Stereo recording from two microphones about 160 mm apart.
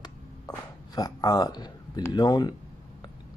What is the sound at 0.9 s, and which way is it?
Speech, 25° left (ahead or behind).